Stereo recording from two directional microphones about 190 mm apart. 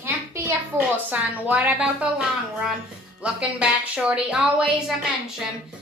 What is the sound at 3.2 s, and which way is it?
A woman's voice, 5° right (ahead or behind).